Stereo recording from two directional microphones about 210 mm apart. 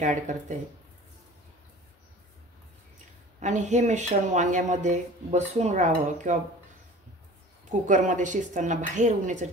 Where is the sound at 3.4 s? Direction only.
35° right (ahead or behind).